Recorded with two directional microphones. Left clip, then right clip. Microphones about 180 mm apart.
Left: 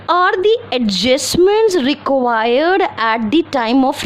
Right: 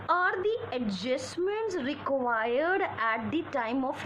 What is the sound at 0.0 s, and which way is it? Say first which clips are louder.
A woman's voice: left 14 dB; 55° left (ahead or behind).